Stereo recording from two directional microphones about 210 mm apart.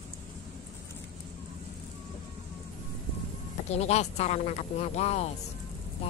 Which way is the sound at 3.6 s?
30° left (ahead or behind).